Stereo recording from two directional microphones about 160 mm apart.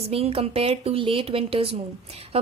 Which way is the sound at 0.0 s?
40° right (ahead or behind).